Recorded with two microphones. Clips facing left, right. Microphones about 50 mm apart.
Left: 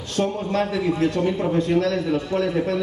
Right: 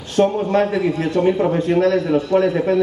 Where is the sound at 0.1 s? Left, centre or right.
Right.